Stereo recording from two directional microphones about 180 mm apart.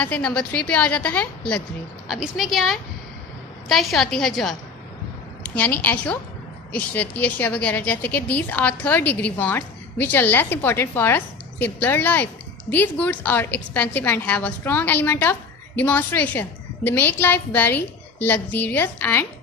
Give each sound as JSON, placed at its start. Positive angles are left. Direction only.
{"t": 0.0, "sound": "a woman's voice", "side_deg": 5}